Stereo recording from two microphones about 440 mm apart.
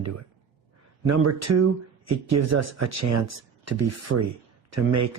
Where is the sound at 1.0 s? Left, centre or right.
Right.